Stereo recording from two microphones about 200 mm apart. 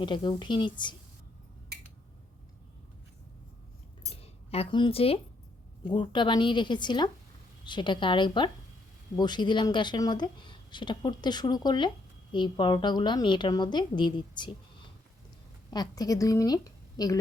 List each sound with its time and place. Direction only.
0.0 s speech: 25° left (ahead or behind)
4.1 s cutlery: 30° left (ahead or behind)
5.9 s a woman's voice: 25° left (ahead or behind)